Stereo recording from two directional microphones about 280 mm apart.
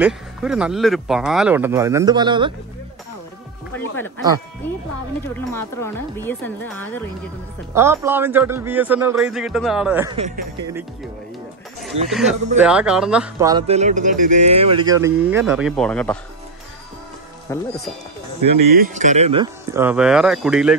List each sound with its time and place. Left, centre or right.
0.0 s speech: centre
5.3 s speech: centre
7.7 s speech: centre
10.1 s speech: right
12.1 s speech: centre
17.5 s speech: centre
18.4 s speech: right
18.9 s speech: right; by 20.7 s centre